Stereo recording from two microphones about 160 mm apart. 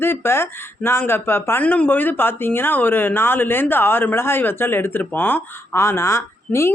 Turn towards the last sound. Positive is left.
turn(degrees=15)  # may be behind; listen again after turning